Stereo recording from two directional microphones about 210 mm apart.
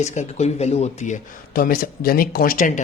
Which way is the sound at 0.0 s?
35° left (ahead or behind).